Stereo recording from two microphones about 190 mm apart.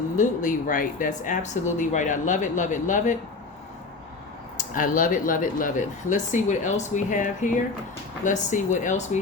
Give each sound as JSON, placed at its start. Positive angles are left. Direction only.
{"t": 0.2, "sound": "speech", "side_deg": 45}
{"t": 4.5, "sound": "speech", "side_deg": 45}